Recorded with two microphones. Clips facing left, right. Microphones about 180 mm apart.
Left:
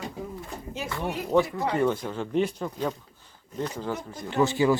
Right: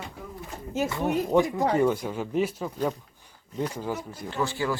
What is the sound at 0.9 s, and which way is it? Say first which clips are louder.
Speech: even; 15° right (ahead or behind).